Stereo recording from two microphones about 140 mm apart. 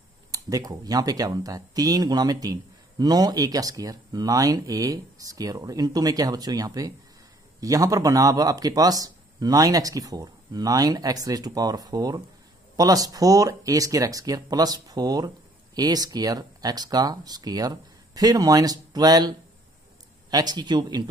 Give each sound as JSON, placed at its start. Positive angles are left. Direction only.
{"t": 0.3, "sound": "speech", "side_deg": -25}